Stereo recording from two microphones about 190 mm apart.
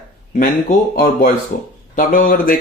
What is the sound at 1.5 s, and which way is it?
Speech, 50° left (ahead or behind).